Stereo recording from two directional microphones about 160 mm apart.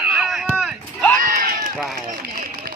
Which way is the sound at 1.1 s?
60° right (ahead or behind).